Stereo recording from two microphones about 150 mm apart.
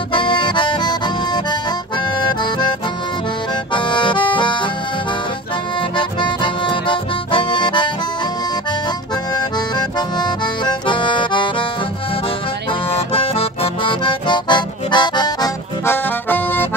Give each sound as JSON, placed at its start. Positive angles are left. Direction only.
{"t": 0.1, "sound": "accordion", "side_deg": 35}
{"t": 3.7, "sound": "accordion", "side_deg": 30}
{"t": 5.9, "sound": "accordion", "side_deg": 30}
{"t": 9.3, "sound": "accordion", "side_deg": 25}
{"t": 12.9, "sound": "accordion", "side_deg": 40}